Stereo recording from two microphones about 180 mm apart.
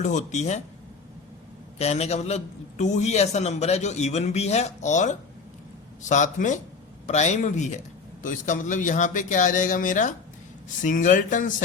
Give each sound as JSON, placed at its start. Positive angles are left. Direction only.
{"t": 0.0, "sound": "a man's voice", "side_deg": 40}
{"t": 1.8, "sound": "a man's voice", "side_deg": 35}